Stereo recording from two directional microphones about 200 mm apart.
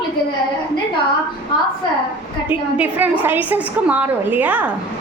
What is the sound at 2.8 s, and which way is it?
A woman's voice, 10° right (ahead or behind).